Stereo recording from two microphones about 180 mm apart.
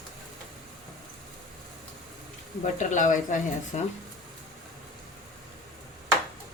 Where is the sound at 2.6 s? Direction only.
45° left (ahead or behind).